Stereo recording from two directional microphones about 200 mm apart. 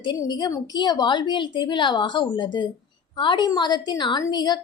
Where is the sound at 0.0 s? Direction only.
20° left (ahead or behind).